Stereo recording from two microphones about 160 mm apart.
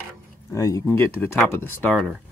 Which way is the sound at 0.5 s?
20° left (ahead or behind).